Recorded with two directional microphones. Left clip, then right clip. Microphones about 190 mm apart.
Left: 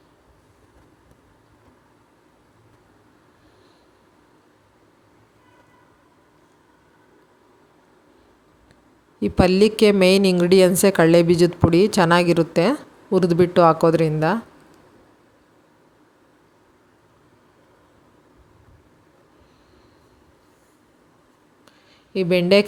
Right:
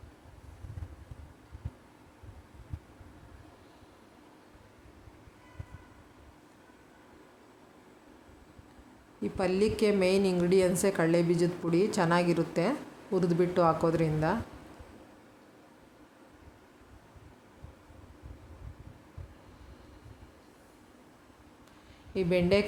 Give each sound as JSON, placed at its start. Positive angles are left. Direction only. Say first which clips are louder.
{"t": 9.2, "sound": "a woman's voice", "louder": "left 12 dB", "side_deg": 45}
{"t": 22.1, "sound": "a woman's voice", "louder": "left 10 dB", "side_deg": 40}